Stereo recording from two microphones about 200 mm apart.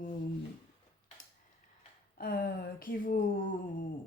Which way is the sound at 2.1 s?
45° left (ahead or behind).